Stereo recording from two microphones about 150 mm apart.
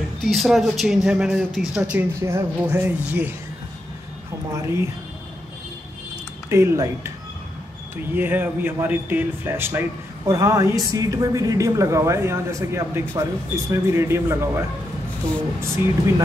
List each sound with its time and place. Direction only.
0.2 s speech: centre (ahead or behind)
4.5 s speech: 20° right (ahead or behind)
6.5 s speech: 20° right (ahead or behind)
15.6 s speech: 15° right (ahead or behind)